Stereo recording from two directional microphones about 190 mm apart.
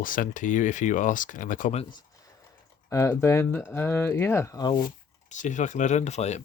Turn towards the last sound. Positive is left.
turn(degrees=35)  # may be behind; listen again after turning